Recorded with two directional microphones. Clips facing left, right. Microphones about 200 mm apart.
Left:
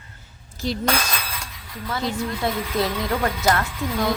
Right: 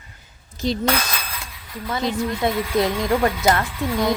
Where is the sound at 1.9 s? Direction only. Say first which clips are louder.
Right 3 dB; 20° right (ahead or behind).